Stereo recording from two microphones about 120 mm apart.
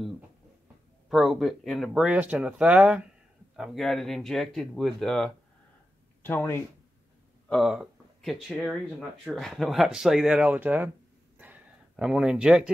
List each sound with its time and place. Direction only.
1.0 s speech: centre (ahead or behind)
6.2 s speech: 20° left (ahead or behind)
7.6 s speech: 5° right (ahead or behind)
11.3 s a sound: 15° right (ahead or behind)